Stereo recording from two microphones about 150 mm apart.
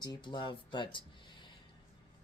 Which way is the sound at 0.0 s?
30° left (ahead or behind).